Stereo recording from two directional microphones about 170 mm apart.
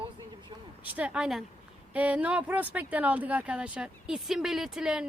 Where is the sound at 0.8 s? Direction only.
10° right (ahead or behind).